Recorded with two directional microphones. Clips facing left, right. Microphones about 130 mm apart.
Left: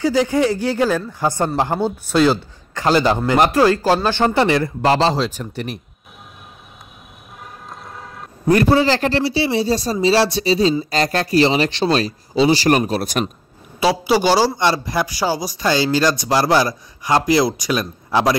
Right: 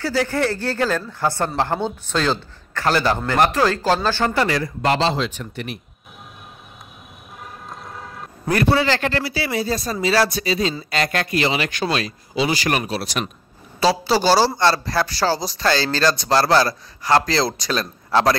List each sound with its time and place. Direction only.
0.0 s speech: 15° left (ahead or behind)
4.9 s speech: 40° left (ahead or behind)
7.7 s vehicle: centre (ahead or behind)
8.5 s speech: 35° left (ahead or behind)
13.7 s speech: 15° left (ahead or behind)